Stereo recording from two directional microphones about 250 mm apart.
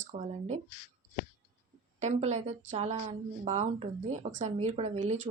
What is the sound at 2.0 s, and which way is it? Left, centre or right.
Speech, right.